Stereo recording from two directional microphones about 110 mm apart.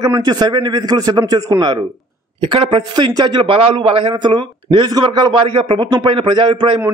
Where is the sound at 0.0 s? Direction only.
40° right (ahead or behind).